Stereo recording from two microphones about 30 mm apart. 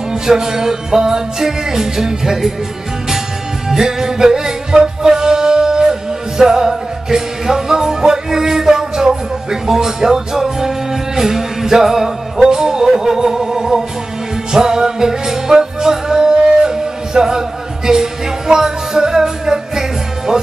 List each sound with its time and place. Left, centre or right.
0.1 s music: centre
3.6 s music: centre